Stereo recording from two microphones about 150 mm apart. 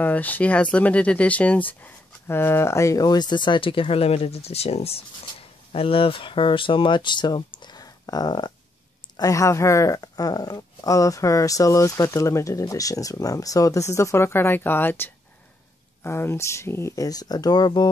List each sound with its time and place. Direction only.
0.0 s speech: 10° left (ahead or behind); by 17.8 s 25° left (ahead or behind)